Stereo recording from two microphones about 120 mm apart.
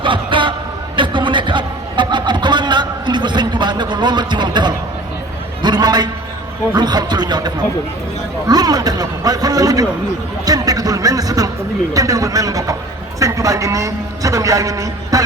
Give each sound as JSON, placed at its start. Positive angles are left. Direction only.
{"t": 0.0, "sound": "a sound", "side_deg": -45}
{"t": 5.6, "sound": "a man's voice", "side_deg": -35}
{"t": 10.4, "sound": "music", "side_deg": -30}
{"t": 11.9, "sound": "a man's voice", "side_deg": -30}